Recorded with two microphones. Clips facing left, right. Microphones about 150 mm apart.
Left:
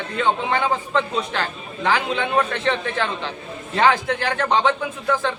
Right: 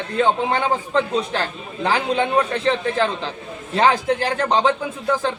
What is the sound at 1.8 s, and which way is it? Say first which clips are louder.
Speech: right 2 dB; 35° right (ahead or behind).